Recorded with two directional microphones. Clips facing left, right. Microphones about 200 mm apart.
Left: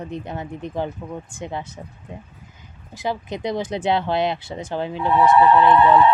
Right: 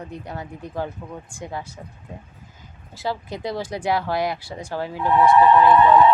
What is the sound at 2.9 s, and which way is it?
Speech, 15° left (ahead or behind).